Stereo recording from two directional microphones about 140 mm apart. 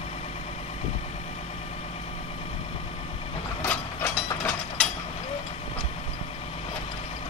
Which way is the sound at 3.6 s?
15° left (ahead or behind).